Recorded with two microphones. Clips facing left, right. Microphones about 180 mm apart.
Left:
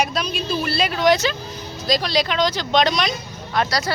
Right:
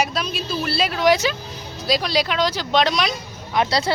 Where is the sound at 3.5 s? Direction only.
20° right (ahead or behind).